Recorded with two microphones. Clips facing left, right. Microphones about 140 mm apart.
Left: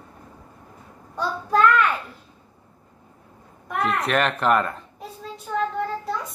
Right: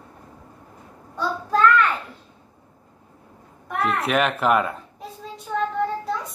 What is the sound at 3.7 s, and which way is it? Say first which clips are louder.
A child's voice: even; centre (ahead or behind).